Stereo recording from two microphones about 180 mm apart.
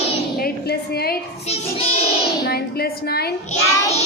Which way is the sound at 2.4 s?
60° left (ahead or behind).